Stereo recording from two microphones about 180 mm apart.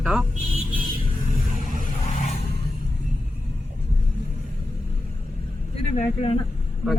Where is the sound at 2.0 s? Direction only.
40° left (ahead or behind).